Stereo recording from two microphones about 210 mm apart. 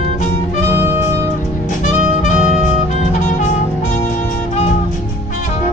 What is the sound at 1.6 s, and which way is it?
Jazz, 35° left (ahead or behind).